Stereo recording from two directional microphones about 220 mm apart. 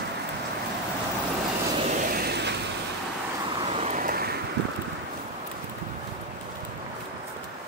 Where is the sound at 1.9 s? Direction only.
45° right (ahead or behind).